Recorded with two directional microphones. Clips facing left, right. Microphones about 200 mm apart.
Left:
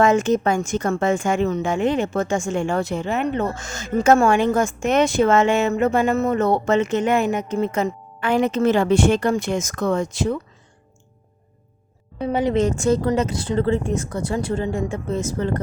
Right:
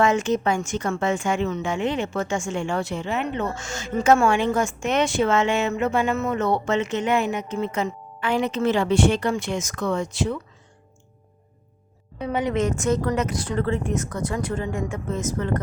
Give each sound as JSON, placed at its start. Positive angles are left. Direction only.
{"t": 0.0, "sound": "a woman's voice", "side_deg": 45}
{"t": 12.2, "sound": "speech", "side_deg": 30}